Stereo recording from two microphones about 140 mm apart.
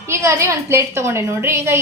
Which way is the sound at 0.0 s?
20° right (ahead or behind).